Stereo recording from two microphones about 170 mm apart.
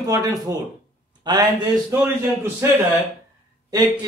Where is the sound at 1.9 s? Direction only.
15° right (ahead or behind).